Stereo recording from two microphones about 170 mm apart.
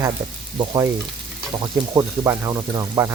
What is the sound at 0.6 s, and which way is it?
Speech, 20° right (ahead or behind).